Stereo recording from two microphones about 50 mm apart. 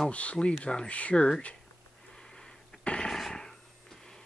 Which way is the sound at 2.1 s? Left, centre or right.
Centre.